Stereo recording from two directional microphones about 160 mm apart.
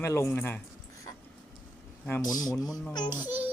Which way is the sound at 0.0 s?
15° left (ahead or behind).